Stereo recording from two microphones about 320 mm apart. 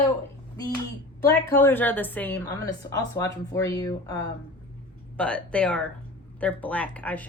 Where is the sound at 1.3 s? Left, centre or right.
Centre.